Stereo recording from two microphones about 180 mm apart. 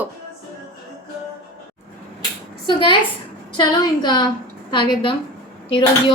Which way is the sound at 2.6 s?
25° left (ahead or behind).